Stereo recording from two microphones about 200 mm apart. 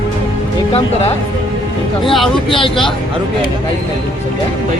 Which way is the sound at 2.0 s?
Centre (ahead or behind).